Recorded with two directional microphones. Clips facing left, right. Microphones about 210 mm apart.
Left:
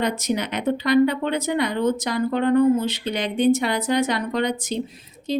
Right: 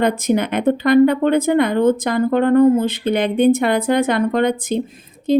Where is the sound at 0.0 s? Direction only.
55° right (ahead or behind).